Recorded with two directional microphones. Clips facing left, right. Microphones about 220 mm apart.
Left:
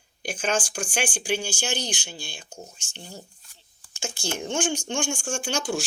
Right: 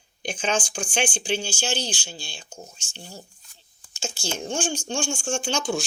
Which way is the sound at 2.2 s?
55° left (ahead or behind).